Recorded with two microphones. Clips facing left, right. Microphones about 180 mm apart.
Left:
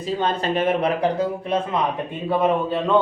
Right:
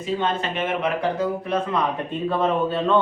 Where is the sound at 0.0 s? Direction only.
35° left (ahead or behind).